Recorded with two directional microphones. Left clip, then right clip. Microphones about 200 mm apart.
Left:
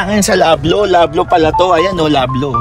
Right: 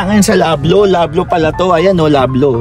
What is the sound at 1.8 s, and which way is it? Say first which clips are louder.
Speech: right 2 dB; 30° right (ahead or behind).